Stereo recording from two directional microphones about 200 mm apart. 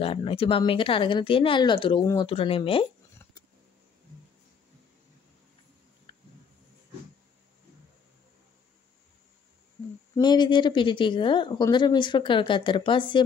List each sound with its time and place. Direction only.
0.0 s speech: 30° left (ahead or behind)
10.1 s speech: 20° left (ahead or behind)